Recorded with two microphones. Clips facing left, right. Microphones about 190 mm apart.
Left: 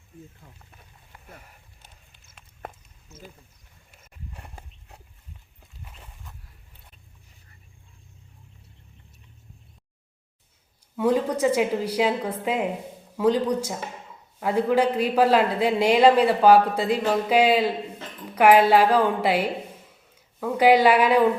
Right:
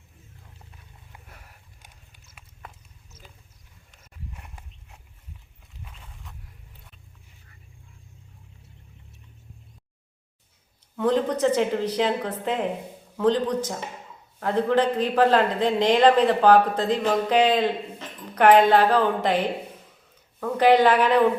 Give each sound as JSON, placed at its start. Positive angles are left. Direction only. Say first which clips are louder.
{"t": 4.4, "sound": "walk", "louder": "left 2 dB", "side_deg": 35}
{"t": 10.9, "sound": "a man's voice", "louder": "even", "side_deg": 10}